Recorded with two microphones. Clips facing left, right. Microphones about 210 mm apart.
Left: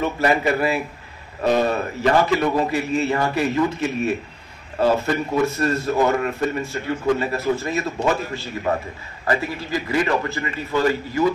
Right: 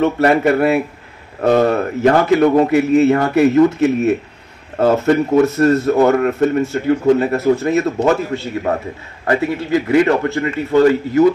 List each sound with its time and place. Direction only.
0.0 s a man's voice: 65° right (ahead or behind)
9.2 s a man's voice: 60° right (ahead or behind)